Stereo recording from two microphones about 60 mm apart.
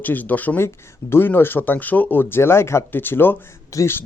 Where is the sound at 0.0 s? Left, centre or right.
Left.